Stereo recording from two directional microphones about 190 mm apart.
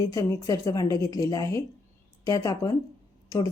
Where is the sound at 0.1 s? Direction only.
15° left (ahead or behind).